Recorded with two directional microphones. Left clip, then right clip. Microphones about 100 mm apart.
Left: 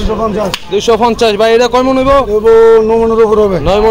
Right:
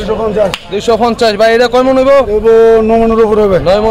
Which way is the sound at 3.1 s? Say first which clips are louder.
Even; 90° right.